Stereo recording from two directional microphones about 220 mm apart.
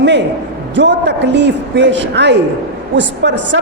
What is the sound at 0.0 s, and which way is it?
A man's voice, 55° right (ahead or behind).